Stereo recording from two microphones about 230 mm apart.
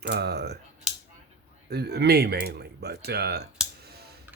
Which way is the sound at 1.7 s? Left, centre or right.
Right.